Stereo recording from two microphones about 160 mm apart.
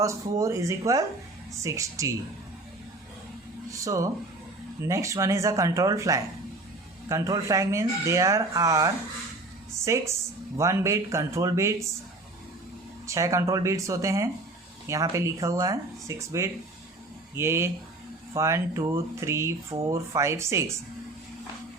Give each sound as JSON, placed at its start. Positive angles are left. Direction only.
{"t": 0.0, "sound": "speech", "side_deg": -20}
{"t": 3.7, "sound": "speech", "side_deg": -20}
{"t": 13.1, "sound": "speech", "side_deg": -20}